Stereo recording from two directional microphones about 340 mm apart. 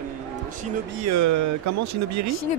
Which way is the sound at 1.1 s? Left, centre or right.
Right.